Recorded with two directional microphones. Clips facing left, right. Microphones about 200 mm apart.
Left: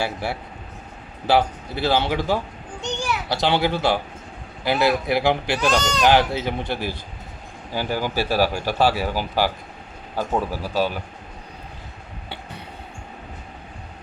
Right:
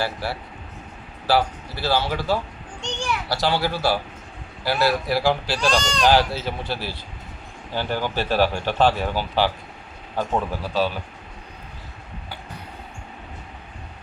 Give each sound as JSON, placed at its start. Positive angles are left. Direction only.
{"t": 1.3, "sound": "speech", "side_deg": 20}
{"t": 2.8, "sound": "children playing", "side_deg": 10}
{"t": 3.2, "sound": "a man's voice", "side_deg": 20}
{"t": 5.8, "sound": "speech", "side_deg": 5}
{"t": 6.1, "sound": "speech", "side_deg": 15}